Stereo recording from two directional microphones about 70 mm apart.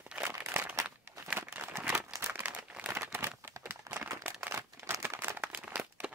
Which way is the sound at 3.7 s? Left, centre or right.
Right.